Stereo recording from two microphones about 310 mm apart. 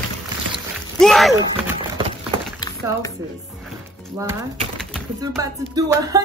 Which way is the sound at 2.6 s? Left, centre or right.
Centre.